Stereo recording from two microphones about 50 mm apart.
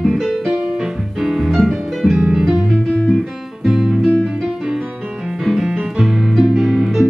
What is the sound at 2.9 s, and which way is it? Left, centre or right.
Guitar, centre.